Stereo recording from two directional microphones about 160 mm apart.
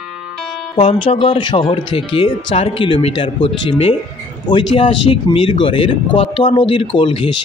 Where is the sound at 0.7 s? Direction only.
35° left (ahead or behind).